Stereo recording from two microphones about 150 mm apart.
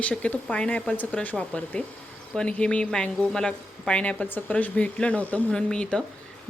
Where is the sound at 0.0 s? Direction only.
10° left (ahead or behind).